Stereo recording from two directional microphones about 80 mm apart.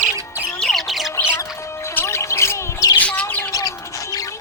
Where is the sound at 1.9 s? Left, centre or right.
Left.